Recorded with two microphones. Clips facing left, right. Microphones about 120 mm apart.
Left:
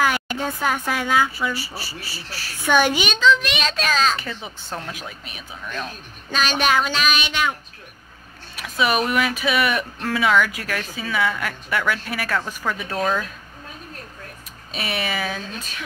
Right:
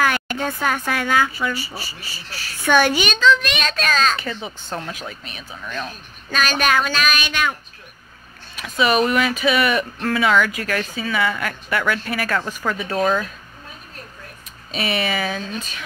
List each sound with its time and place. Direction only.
0.0 s a sound: 15° left (ahead or behind)
0.5 s speech: 15° left (ahead or behind)
4.2 s a woman's voice: centre (ahead or behind)
6.3 s a sound: 20° left (ahead or behind)
8.5 s a woman's voice: 5° left (ahead or behind)
14.7 s a woman's voice: centre (ahead or behind)